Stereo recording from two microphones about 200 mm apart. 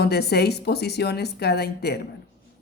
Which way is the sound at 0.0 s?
55° left (ahead or behind).